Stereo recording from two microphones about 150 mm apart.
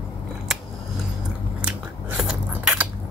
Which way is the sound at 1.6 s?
5° right (ahead or behind).